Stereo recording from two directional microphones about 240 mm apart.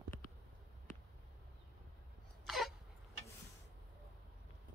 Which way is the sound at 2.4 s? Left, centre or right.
Centre.